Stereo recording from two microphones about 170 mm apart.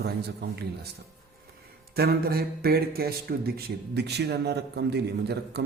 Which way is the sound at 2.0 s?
65° right (ahead or behind).